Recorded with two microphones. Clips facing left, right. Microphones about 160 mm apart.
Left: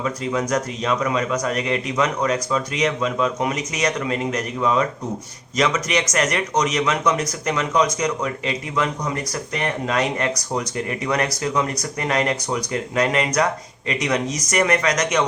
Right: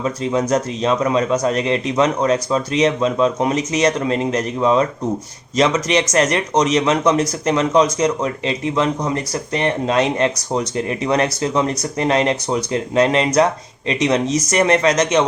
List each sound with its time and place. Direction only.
0.0 s a man's voice: 25° right (ahead or behind)